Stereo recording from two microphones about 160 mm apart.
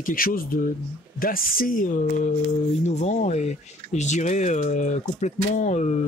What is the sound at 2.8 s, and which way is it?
Speech, 45° left (ahead or behind).